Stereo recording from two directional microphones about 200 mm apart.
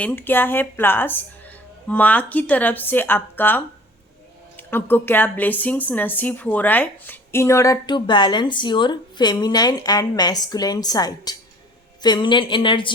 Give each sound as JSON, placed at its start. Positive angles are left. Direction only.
{"t": 0.0, "sound": "speech", "side_deg": 10}